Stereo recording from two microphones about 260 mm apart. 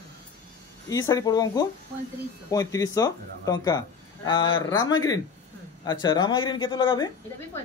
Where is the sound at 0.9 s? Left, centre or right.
Centre.